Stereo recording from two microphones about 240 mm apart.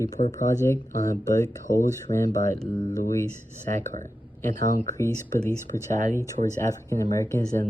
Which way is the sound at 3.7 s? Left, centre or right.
Right.